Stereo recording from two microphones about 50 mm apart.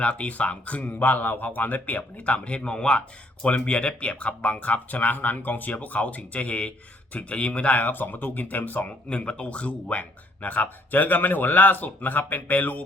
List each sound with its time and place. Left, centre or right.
0.0 s speech: left
9.0 s speech: centre